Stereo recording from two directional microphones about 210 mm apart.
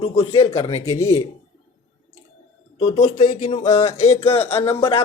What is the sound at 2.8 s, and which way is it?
Speech, 30° left (ahead or behind).